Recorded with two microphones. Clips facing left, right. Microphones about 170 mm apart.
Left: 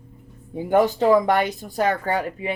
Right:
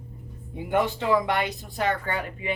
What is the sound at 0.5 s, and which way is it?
Speech, 40° left (ahead or behind).